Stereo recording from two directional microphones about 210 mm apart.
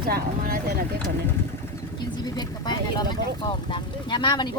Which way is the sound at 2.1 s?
20° left (ahead or behind).